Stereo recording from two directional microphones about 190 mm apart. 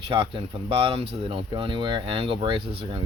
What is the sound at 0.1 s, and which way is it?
Speech, 25° right (ahead or behind).